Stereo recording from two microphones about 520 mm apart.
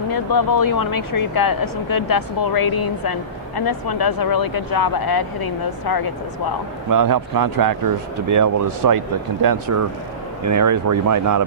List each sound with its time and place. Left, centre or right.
0.1 s speech: left
6.9 s speech: right